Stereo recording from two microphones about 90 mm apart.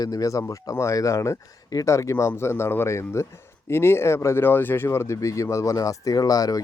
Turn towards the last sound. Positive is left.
turn(degrees=40)  # may be behind; listen again after turning